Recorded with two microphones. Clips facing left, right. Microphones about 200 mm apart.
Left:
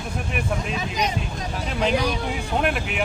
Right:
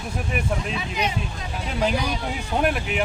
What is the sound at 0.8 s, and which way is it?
Speech, 40° left (ahead or behind).